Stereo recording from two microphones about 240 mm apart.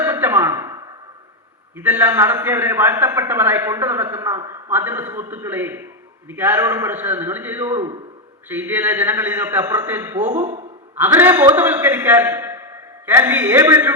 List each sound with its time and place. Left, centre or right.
0.0 s a sound: centre
1.7 s a man's voice: centre
10.4 s a man's voice: right
10.9 s a man's voice: centre